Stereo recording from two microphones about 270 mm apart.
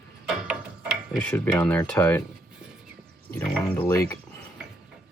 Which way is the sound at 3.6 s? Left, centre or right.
Centre.